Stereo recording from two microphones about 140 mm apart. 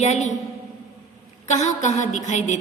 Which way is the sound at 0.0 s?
55° left (ahead or behind).